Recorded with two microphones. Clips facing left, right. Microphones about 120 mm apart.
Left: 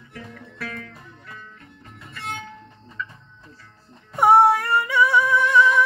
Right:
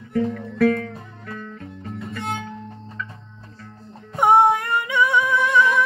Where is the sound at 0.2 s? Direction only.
90° right.